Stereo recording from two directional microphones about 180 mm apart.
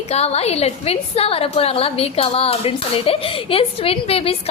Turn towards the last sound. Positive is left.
turn(degrees=30)  # may be behind; listen again after turning